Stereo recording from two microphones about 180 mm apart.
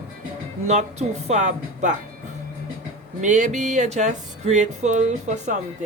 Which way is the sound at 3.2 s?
45° right (ahead or behind).